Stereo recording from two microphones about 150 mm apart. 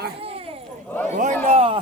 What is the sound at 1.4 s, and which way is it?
Speech, 40° right (ahead or behind).